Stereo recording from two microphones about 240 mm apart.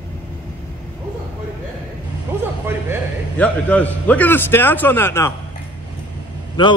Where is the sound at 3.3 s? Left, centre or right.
Centre.